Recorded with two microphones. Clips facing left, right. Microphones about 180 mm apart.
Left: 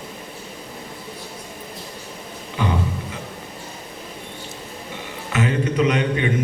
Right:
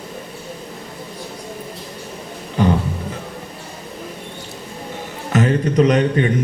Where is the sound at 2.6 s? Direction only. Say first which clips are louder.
Right 7 dB; 40° right (ahead or behind).